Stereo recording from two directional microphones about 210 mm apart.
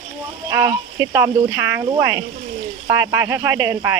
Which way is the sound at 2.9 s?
15° right (ahead or behind).